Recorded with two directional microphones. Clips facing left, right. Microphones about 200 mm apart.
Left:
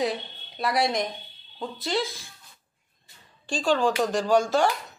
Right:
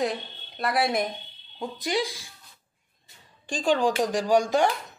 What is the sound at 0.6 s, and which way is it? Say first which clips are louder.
Speech: even; centre (ahead or behind).